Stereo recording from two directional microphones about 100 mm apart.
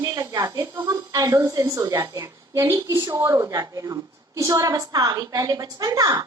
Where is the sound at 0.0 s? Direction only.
35° right (ahead or behind).